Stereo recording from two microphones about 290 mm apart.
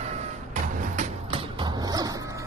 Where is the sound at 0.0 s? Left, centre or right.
Right.